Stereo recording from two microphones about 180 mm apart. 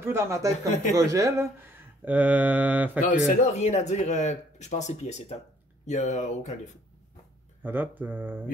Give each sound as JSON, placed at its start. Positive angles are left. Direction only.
{"t": 0.0, "sound": "mantra", "side_deg": -15}
{"t": 3.2, "sound": "speech", "side_deg": 40}
{"t": 7.6, "sound": "mantra", "side_deg": -10}